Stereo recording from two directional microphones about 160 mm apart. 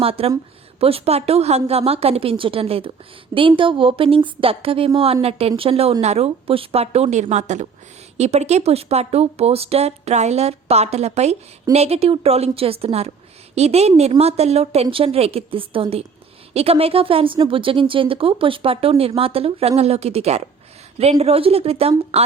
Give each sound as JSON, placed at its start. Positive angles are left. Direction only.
{"t": 0.0, "sound": "speech", "side_deg": -35}